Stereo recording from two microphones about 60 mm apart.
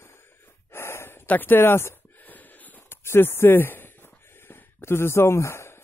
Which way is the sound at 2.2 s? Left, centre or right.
Left.